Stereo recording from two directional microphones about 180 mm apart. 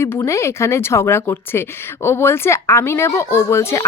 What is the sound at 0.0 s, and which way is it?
Speech, 15° left (ahead or behind).